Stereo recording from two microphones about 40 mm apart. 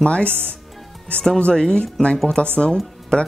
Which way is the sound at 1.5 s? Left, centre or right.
Centre.